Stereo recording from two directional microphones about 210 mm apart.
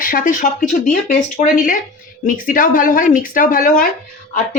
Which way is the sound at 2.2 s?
40° left (ahead or behind).